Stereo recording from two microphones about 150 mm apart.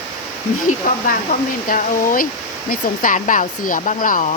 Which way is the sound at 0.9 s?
65° left (ahead or behind).